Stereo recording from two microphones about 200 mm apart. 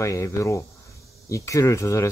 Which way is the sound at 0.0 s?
15° left (ahead or behind).